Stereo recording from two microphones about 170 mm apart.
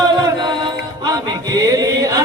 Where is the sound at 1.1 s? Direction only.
20° right (ahead or behind).